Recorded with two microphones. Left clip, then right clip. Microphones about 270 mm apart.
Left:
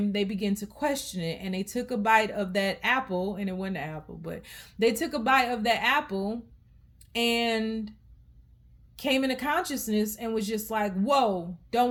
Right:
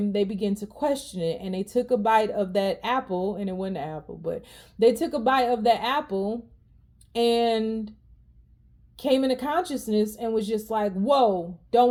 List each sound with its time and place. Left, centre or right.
0.1 s speech: left
7.4 s speech: left
9.5 s speech: left